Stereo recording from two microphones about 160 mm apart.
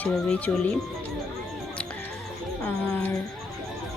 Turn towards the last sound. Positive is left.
turn(degrees=10)  # may be behind; listen again after turning